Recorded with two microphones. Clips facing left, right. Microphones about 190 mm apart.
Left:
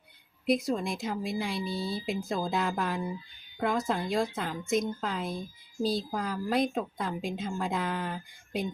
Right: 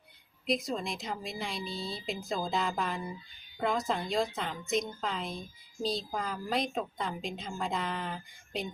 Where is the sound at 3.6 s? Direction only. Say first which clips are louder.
Left 2 dB; 10° right (ahead or behind).